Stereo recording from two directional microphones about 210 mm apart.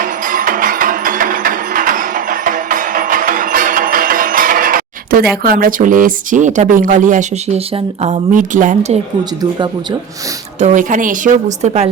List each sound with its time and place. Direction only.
0.0 s music: 40° right (ahead or behind)
10.6 s a woman's voice: 35° right (ahead or behind)